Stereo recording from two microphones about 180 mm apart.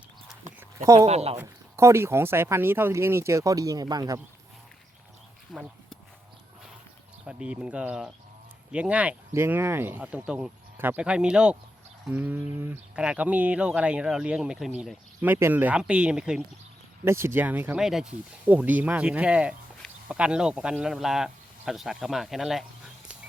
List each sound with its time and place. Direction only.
0.8 s speech: 15° right (ahead or behind)
1.0 s speech: 35° right (ahead or behind)
1.4 s speech: 15° right (ahead or behind)
5.5 s speech: centre (ahead or behind)
7.3 s speech: 5° right (ahead or behind)